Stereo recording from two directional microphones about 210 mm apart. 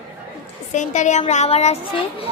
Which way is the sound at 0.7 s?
35° left (ahead or behind).